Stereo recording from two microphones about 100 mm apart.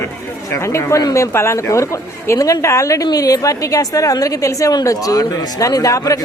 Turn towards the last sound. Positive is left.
turn(degrees=35)  # may be behind; listen again after turning